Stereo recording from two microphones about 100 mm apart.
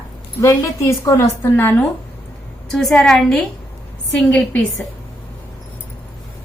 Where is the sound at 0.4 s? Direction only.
30° left (ahead or behind).